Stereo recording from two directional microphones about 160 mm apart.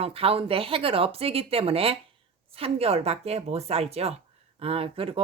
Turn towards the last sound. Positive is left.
turn(degrees=-35)  # may be behind; listen again after turning